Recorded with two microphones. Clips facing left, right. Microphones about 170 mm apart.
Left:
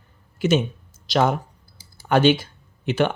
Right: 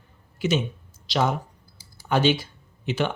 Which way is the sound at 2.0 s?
60° left (ahead or behind).